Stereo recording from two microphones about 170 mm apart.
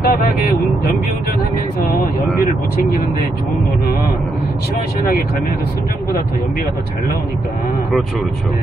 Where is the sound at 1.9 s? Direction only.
55° left (ahead or behind).